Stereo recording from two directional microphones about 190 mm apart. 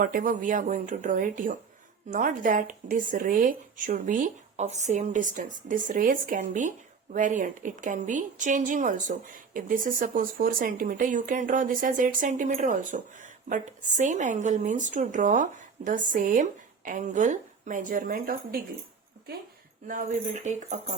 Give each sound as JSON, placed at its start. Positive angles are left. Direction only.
{"t": 0.0, "sound": "speech", "side_deg": -45}
{"t": 19.9, "sound": "speech", "side_deg": -45}